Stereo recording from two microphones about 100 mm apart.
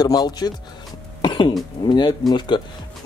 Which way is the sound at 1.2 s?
50° left (ahead or behind).